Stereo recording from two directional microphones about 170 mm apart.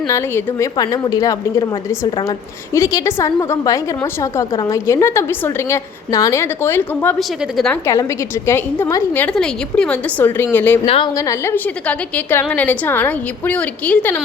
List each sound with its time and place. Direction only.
0.1 s a woman's voice: 15° left (ahead or behind)
2.7 s a woman's voice: 20° left (ahead or behind)
7.2 s speech: centre (ahead or behind)
8.4 s a woman's voice: 15° left (ahead or behind)
10.8 s a woman's voice: 35° left (ahead or behind)
11.1 s a woman's voice: 20° left (ahead or behind)